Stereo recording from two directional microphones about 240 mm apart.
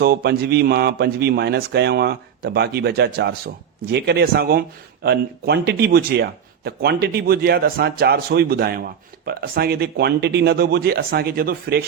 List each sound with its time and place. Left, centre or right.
0.0 s speech: right